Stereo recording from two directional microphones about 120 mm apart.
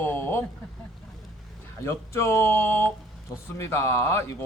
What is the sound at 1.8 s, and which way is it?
Speech, 20° left (ahead or behind).